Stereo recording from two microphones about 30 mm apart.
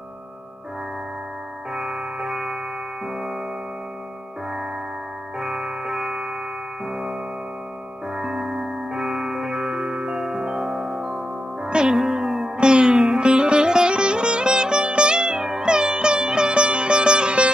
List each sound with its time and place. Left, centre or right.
1.7 s music: centre
5.5 s music: centre
9.6 s music: right
10.1 s music: centre
10.4 s music: right
15.1 s music: right